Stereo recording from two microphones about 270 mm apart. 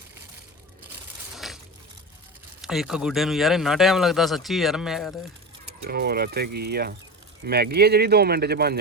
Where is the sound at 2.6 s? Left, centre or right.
Centre.